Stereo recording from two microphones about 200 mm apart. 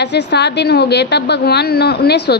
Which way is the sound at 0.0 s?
60° left (ahead or behind).